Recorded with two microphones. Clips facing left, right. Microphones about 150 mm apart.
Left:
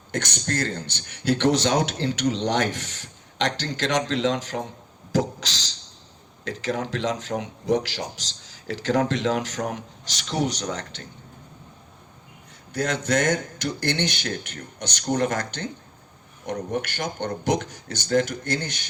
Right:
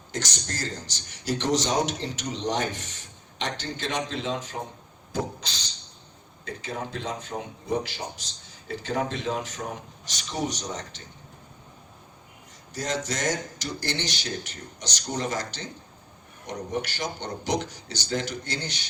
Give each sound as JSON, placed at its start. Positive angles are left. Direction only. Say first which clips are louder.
{"t": 0.1, "sound": "a man's voice", "louder": "left 6 dB", "side_deg": 55}
{"t": 5.1, "sound": "a sound", "louder": "left 6 dB", "side_deg": 90}
{"t": 6.4, "sound": "speech", "louder": "left 6 dB", "side_deg": 90}
{"t": 12.7, "sound": "speech", "louder": "left 6 dB", "side_deg": 60}